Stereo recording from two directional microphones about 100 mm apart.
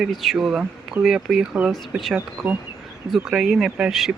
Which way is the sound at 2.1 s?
20° right (ahead or behind).